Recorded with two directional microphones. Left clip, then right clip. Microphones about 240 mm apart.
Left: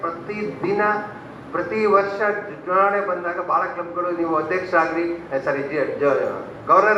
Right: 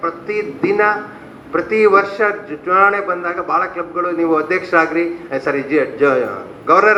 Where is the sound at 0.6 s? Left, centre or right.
Right.